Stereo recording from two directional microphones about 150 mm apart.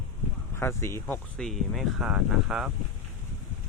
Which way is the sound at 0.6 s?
15° left (ahead or behind).